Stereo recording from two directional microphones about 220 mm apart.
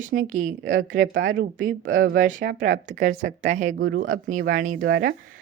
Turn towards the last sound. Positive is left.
turn(degrees=-40)  # may be behind; listen again after turning